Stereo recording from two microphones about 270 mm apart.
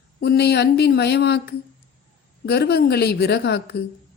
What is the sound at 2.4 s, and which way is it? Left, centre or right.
Speech, left.